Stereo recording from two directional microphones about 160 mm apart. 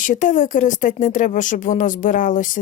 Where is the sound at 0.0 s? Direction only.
55° left (ahead or behind).